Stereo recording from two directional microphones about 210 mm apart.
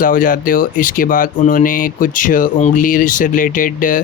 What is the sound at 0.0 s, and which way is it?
Speech, 40° left (ahead or behind).